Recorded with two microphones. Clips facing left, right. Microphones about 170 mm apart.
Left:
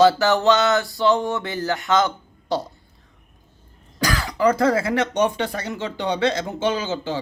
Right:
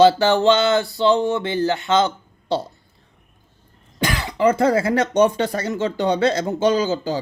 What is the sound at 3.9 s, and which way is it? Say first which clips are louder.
Speech: right 1 dB; 25° right (ahead or behind).